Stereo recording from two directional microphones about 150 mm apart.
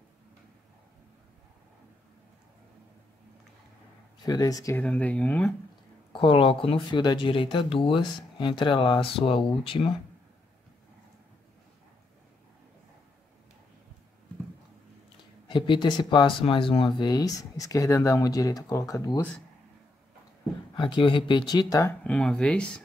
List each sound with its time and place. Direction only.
4.3 s speech: 25° left (ahead or behind)
4.7 s speech: 10° left (ahead or behind)
6.1 s speech: 35° left (ahead or behind)
15.4 s speech: 30° left (ahead or behind)
20.7 s speech: 30° left (ahead or behind)
22.0 s speech: 5° left (ahead or behind)